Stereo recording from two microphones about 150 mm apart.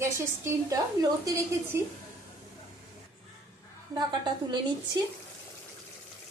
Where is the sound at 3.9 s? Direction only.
30° right (ahead or behind).